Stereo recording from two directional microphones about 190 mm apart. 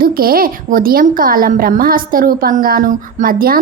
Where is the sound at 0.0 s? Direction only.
50° right (ahead or behind).